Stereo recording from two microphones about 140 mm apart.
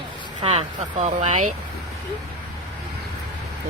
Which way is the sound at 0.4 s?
55° right (ahead or behind).